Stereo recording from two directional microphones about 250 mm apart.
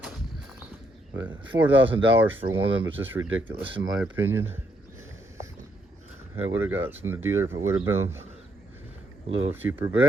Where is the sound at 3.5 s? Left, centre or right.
Centre.